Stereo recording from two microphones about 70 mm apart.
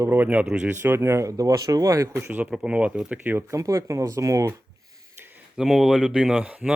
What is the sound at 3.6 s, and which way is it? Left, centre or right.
Speech, right.